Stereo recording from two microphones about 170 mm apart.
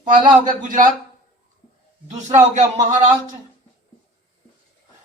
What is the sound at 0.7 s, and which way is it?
Speech, 50° right (ahead or behind).